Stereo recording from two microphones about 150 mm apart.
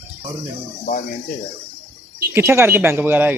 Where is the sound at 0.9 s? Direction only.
70° left (ahead or behind).